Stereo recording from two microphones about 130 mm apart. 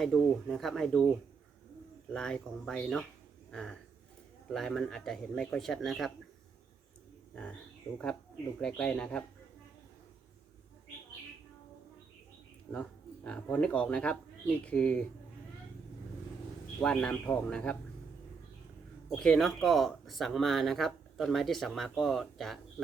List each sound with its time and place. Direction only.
0.0 s speech: centre (ahead or behind)
2.1 s speech: 5° left (ahead or behind)
8.6 s speech: 10° left (ahead or behind)
12.7 s speech: 10° left (ahead or behind)
16.8 s speech: 5° left (ahead or behind)
19.1 s speech: 5° left (ahead or behind)